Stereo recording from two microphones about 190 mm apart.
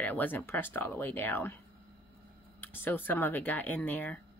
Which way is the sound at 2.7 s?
10° left (ahead or behind).